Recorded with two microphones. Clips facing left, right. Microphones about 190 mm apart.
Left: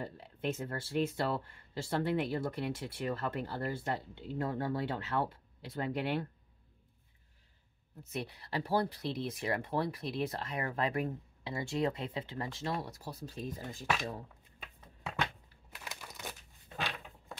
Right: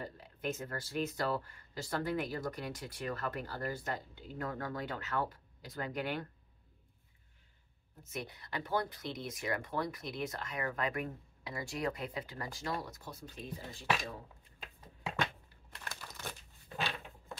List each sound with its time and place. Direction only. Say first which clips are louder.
0.0 s speech: left 3 dB; 30° left (ahead or behind)
8.0 s speech: left 3 dB; 30° left (ahead or behind)
15.9 s a sound: even; 15° left (ahead or behind)